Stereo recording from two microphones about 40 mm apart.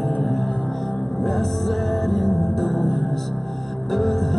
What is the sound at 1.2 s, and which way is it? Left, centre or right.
Music, centre.